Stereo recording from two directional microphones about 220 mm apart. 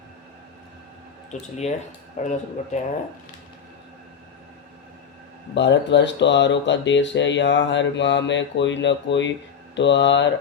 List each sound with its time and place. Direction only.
1.3 s speech: 30° left (ahead or behind)
5.5 s speech: 55° left (ahead or behind)